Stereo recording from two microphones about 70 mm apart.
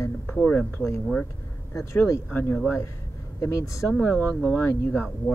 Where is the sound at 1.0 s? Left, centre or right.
Centre.